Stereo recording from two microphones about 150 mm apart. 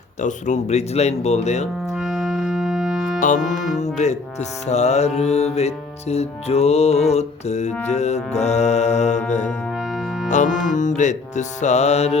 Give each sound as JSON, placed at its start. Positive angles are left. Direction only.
{"t": 0.2, "sound": "music", "side_deg": 55}
{"t": 1.9, "sound": "music", "side_deg": 0}
{"t": 3.2, "sound": "music", "side_deg": 55}
{"t": 3.5, "sound": "music", "side_deg": 0}
{"t": 3.8, "sound": "music", "side_deg": 50}
{"t": 9.5, "sound": "music", "side_deg": 0}
{"t": 10.2, "sound": "music", "side_deg": 55}